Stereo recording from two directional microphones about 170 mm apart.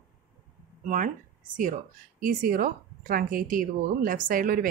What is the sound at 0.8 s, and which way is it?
A woman's voice, 50° right (ahead or behind).